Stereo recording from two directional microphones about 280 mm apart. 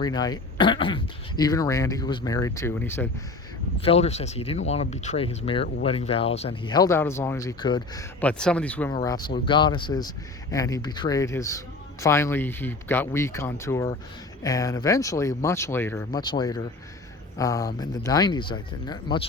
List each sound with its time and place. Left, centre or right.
0.0 s speech: centre
3.8 s speech: left